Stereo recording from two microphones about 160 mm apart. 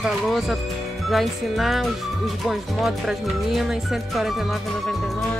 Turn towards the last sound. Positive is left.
turn(degrees=0)  # may be behind; listen again after turning